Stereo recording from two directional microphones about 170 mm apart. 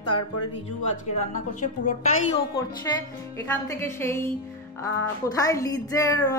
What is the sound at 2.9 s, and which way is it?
Speech, 20° left (ahead or behind).